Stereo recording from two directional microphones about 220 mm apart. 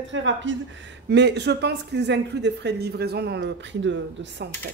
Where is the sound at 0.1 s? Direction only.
60° right (ahead or behind).